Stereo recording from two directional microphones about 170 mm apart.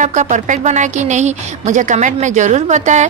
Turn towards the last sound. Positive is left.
turn(degrees=-45)  # may be behind; listen again after turning